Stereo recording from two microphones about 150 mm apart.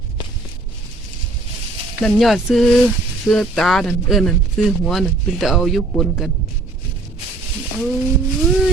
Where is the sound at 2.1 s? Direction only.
Centre (ahead or behind).